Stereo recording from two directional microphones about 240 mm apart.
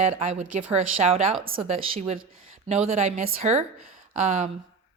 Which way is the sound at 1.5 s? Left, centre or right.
Right.